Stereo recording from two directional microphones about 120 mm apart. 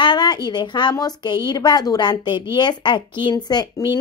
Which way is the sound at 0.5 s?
40° left (ahead or behind).